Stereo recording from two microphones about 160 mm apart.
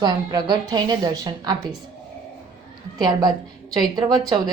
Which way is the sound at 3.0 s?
25° right (ahead or behind).